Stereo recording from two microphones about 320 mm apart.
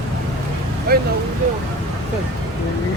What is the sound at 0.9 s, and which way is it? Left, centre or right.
Speech, right.